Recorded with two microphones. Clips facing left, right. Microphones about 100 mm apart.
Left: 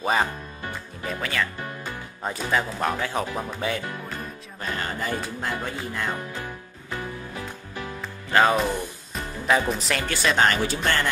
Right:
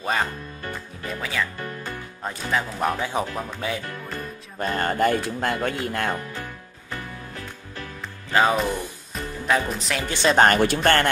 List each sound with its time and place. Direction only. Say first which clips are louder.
0.0 s speech: left 2 dB; 5° left (ahead or behind)
1.0 s music: left 1 dB; centre (ahead or behind)
2.8 s speech: right 1 dB; 15° right (ahead or behind)
3.3 s speech: left 1 dB; centre (ahead or behind)
4.6 s speech: right 8 dB; 50° right (ahead or behind); by 6.1 s 65° right (ahead or behind)
8.3 s speech: even; 5° right (ahead or behind)
9.1 s music: even; centre (ahead or behind)
10.0 s speech: right 5 dB; 25° right (ahead or behind)
10.3 s speech: right 6 dB; 50° right (ahead or behind)